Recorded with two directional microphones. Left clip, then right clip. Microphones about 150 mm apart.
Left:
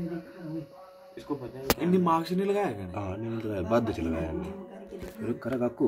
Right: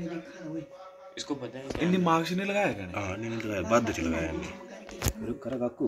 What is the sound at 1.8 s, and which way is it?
Speech, 30° right (ahead or behind).